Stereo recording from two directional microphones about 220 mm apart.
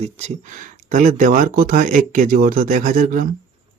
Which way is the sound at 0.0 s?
30° right (ahead or behind).